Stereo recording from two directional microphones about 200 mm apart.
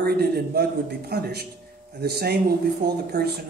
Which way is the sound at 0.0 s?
50° right (ahead or behind).